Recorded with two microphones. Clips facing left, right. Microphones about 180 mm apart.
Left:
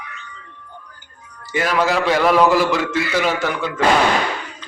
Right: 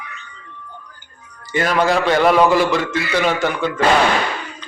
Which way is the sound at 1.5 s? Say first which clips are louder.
Right 2 dB; 5° left (ahead or behind).